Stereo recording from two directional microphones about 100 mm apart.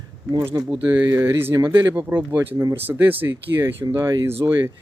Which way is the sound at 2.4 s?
35° right (ahead or behind).